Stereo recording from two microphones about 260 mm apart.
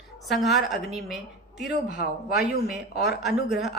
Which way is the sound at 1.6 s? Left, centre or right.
Left.